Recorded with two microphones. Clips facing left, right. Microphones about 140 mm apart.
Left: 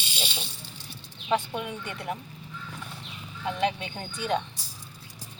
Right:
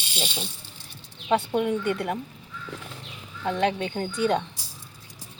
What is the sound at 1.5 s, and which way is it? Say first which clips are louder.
Speech: right 10 dB; 50° right (ahead or behind).